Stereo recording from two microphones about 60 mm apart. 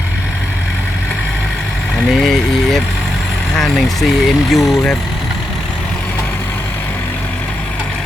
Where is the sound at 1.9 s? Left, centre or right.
Centre.